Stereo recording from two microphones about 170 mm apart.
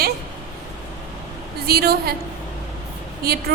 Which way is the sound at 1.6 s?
65° right (ahead or behind).